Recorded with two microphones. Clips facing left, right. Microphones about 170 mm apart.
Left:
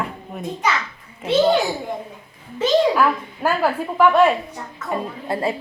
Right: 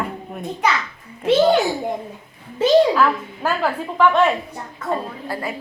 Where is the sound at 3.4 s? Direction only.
10° left (ahead or behind).